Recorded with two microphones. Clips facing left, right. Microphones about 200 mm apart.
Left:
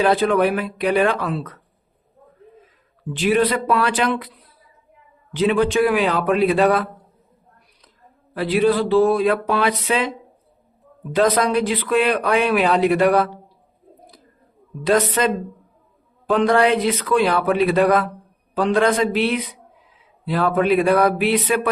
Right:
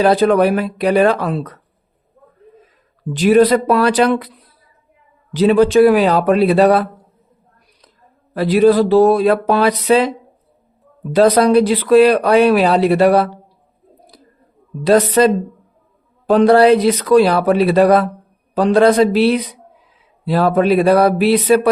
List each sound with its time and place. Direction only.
0.0 s speech: 40° right (ahead or behind)
3.1 s speech: 40° right (ahead or behind)
5.3 s speech: 35° right (ahead or behind)
8.3 s speech: 40° right (ahead or behind)
11.1 s speech: 35° right (ahead or behind)
14.8 s speech: 35° right (ahead or behind)